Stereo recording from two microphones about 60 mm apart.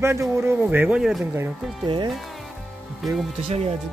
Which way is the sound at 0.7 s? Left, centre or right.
Right.